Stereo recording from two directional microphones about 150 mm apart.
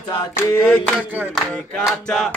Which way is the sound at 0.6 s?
5° right (ahead or behind).